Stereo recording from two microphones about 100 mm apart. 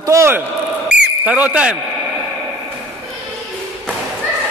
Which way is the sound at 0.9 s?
10° right (ahead or behind).